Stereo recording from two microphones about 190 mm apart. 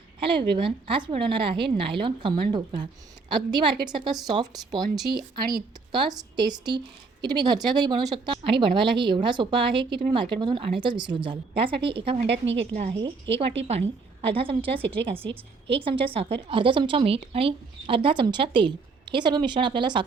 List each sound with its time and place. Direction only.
0.2 s a woman's voice: 25° right (ahead or behind)
14.2 s a woman's voice: 30° right (ahead or behind)